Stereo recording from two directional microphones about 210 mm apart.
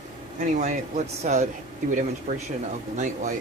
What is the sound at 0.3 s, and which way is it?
Speech, 35° right (ahead or behind).